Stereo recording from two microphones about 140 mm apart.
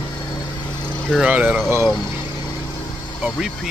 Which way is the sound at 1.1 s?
10° right (ahead or behind).